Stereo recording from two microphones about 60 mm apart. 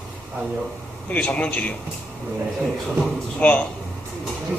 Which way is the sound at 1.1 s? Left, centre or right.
Left.